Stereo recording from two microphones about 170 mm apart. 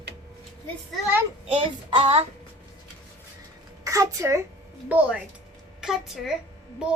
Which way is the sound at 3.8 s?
20° right (ahead or behind).